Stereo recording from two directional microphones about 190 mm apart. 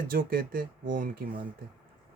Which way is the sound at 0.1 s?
50° right (ahead or behind).